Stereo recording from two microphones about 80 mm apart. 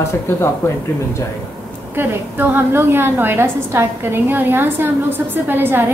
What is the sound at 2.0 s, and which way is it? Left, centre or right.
A woman's voice, right.